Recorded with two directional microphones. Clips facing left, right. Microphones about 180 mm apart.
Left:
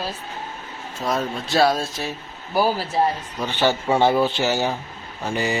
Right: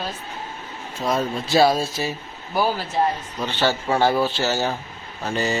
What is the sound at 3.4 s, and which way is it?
Speech, 15° left (ahead or behind).